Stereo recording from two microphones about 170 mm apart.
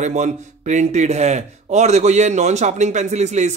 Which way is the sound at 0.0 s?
45° right (ahead or behind).